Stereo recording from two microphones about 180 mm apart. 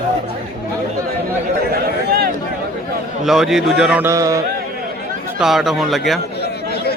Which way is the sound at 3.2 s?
Centre (ahead or behind).